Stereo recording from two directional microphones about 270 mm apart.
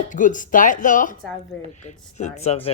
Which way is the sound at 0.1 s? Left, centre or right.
Left.